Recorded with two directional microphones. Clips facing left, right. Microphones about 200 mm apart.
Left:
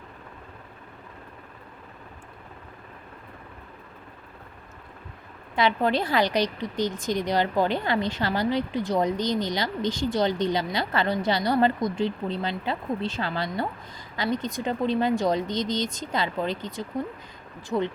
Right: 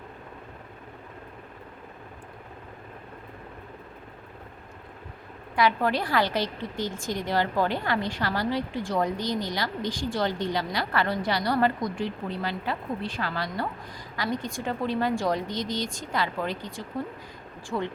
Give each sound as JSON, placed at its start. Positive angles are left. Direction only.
{"t": 5.5, "sound": "a woman's voice", "side_deg": 25}